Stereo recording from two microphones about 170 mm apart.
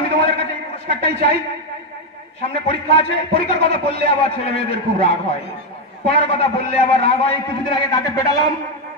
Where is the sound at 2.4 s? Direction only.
35° left (ahead or behind).